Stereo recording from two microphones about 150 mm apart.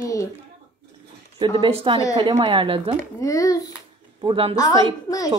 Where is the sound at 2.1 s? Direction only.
25° right (ahead or behind).